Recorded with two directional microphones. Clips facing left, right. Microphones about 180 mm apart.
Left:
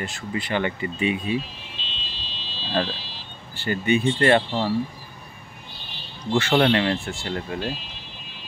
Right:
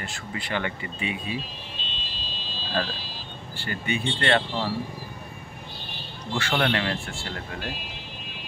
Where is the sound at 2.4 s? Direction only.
45° right (ahead or behind).